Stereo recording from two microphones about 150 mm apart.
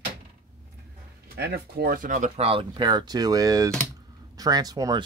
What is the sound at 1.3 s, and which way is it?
Speech, 90° right.